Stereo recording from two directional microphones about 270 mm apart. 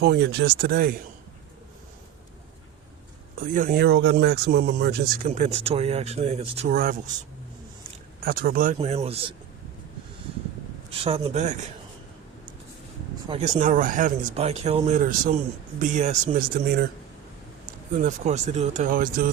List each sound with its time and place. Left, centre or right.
0.0 s speech: right
3.4 s speech: right
8.2 s speech: right
11.0 s speech: right
13.2 s speech: centre
17.9 s speech: right